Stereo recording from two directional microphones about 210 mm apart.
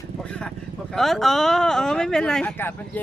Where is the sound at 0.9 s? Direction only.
Centre (ahead or behind).